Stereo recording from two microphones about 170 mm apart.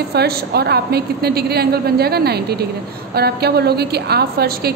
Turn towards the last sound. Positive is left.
turn(degrees=-65)  # may be behind; listen again after turning